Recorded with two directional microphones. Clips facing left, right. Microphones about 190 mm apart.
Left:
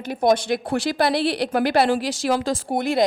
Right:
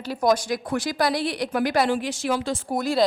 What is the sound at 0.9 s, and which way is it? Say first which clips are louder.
Speech: left 2 dB; 30° left (ahead or behind).